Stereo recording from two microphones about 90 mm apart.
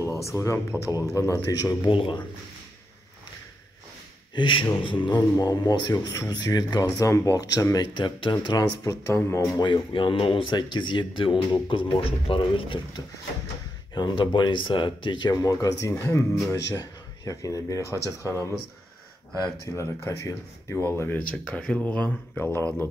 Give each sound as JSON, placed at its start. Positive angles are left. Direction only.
{"t": 0.2, "sound": "speech", "side_deg": 35}
{"t": 1.9, "sound": "speech", "side_deg": 75}
{"t": 4.4, "sound": "speech", "side_deg": 65}
{"t": 5.1, "sound": "speech", "side_deg": 45}
{"t": 7.9, "sound": "speech", "side_deg": 65}
{"t": 8.5, "sound": "speech", "side_deg": 45}
{"t": 9.0, "sound": "speech", "side_deg": 25}
{"t": 9.6, "sound": "speech", "side_deg": 60}
{"t": 13.9, "sound": "speech", "side_deg": 55}
{"t": 15.3, "sound": "speech", "side_deg": 40}
{"t": 19.7, "sound": "speech", "side_deg": 30}
{"t": 21.5, "sound": "speech", "side_deg": 10}
{"t": 22.4, "sound": "speech", "side_deg": 25}